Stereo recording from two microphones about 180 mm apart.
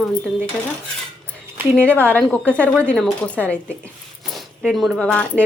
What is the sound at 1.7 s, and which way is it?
A woman's voice, 5° left (ahead or behind).